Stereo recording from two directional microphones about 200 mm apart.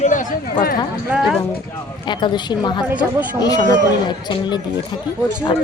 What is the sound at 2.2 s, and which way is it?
Speech, 20° left (ahead or behind).